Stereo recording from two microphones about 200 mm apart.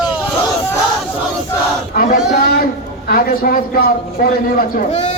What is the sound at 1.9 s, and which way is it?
A man's voice, 45° left (ahead or behind).